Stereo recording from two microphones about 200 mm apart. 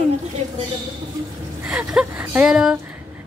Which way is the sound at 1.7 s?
5° right (ahead or behind).